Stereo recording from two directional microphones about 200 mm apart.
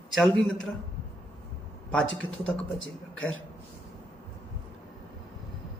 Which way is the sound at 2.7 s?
70° left (ahead or behind).